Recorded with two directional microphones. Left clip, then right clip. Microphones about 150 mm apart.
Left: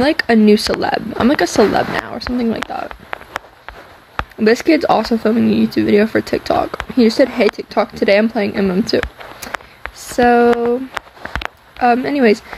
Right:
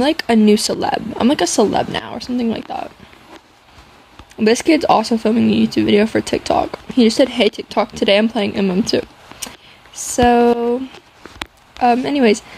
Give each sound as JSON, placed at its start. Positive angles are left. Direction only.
{"t": 0.0, "sound": "speech", "side_deg": -35}
{"t": 1.7, "sound": "speech", "side_deg": -25}
{"t": 4.4, "sound": "speech", "side_deg": -40}
{"t": 11.7, "sound": "speech", "side_deg": -45}